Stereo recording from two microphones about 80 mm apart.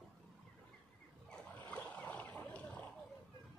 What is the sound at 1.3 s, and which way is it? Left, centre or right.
Boat, centre.